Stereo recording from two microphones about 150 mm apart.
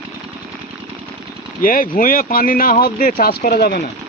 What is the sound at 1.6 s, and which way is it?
Speech, 70° left (ahead or behind).